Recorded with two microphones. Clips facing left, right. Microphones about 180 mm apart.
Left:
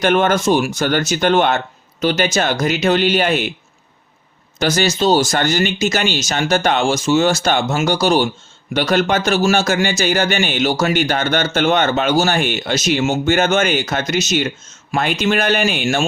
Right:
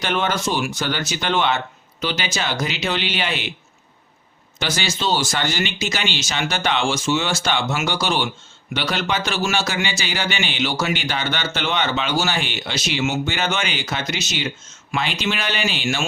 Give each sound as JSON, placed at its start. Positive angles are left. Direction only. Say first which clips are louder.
{"t": 0.0, "sound": "a man's voice", "louder": "left 8 dB", "side_deg": 50}
{"t": 4.6, "sound": "a man's voice", "louder": "left 8 dB", "side_deg": 45}